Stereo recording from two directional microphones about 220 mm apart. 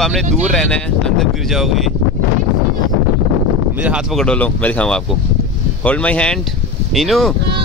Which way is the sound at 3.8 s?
5° right (ahead or behind).